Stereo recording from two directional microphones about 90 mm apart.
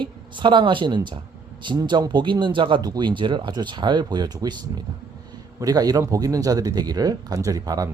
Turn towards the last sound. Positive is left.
turn(degrees=-40)  # may be behind; listen again after turning